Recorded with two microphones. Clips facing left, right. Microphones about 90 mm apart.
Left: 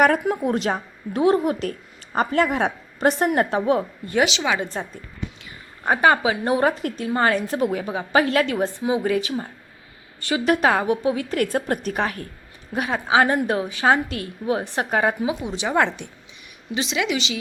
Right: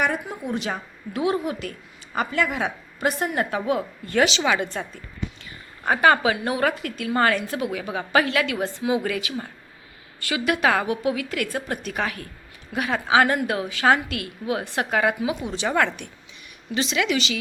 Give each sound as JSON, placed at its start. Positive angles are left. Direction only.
{"t": 0.0, "sound": "a woman's voice", "side_deg": 55}
{"t": 3.5, "sound": "a woman's voice", "side_deg": 30}
{"t": 4.1, "sound": "speech", "side_deg": 15}
{"t": 4.6, "sound": "a woman's voice", "side_deg": 30}
{"t": 7.9, "sound": "a woman's voice", "side_deg": 25}
{"t": 8.3, "sound": "a woman's voice", "side_deg": 35}
{"t": 8.6, "sound": "a woman's voice", "side_deg": 25}